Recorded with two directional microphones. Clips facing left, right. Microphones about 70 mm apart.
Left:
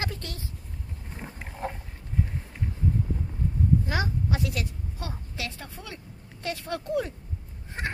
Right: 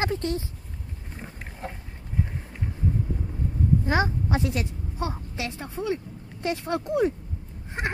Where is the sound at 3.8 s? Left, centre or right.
Right.